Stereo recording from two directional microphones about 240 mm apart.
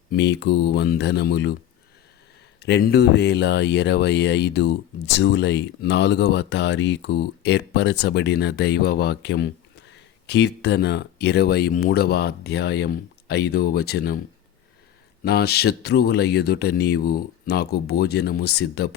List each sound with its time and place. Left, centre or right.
0.1 s speech: left
2.6 s speech: left
15.2 s speech: left